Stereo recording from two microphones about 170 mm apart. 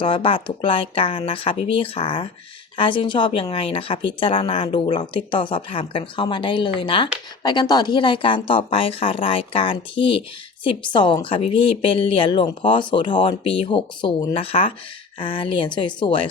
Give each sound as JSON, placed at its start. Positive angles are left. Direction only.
{"t": 0.0, "sound": "speech", "side_deg": 30}